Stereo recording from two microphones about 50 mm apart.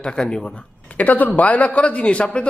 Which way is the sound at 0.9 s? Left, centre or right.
Left.